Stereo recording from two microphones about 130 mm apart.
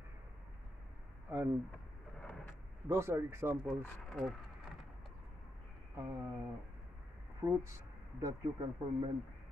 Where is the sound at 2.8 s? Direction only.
20° right (ahead or behind).